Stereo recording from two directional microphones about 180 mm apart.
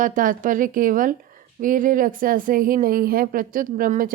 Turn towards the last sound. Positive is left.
turn(degrees=-50)  # may be behind; listen again after turning